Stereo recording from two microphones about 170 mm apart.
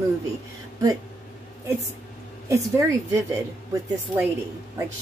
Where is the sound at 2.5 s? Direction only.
15° right (ahead or behind).